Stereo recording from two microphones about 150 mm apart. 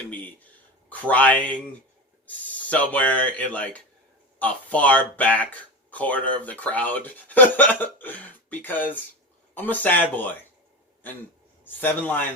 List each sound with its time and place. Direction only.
0.9 s speech: 10° left (ahead or behind)
11.6 s speech: 10° left (ahead or behind)